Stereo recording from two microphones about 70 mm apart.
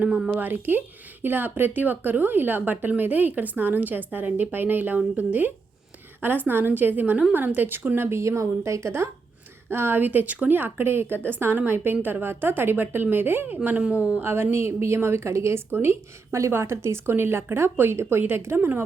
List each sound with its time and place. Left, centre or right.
0.3 s speech: right